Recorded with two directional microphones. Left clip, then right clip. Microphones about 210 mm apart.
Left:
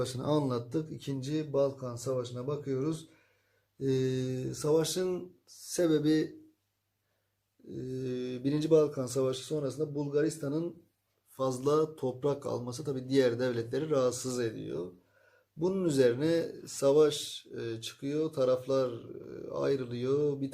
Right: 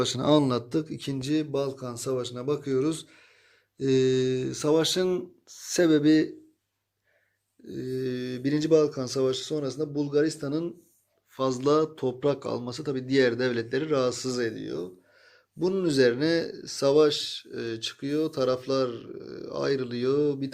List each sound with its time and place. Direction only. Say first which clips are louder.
0.0 s speech: right 8 dB; 35° right (ahead or behind)
7.7 s speech: right 6 dB; 30° right (ahead or behind)